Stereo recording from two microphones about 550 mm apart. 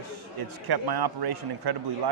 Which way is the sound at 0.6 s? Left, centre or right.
Right.